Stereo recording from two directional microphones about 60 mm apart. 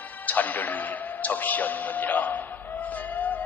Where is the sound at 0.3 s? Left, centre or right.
Left.